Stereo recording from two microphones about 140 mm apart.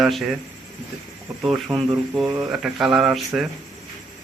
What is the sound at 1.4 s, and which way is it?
Speech, 5° right (ahead or behind).